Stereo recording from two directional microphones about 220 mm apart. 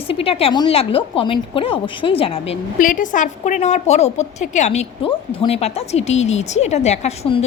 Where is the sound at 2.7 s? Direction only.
40° left (ahead or behind).